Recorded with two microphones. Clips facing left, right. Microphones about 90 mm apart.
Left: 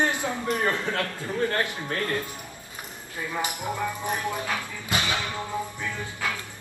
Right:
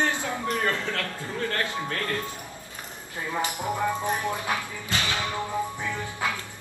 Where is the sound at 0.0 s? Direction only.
20° left (ahead or behind).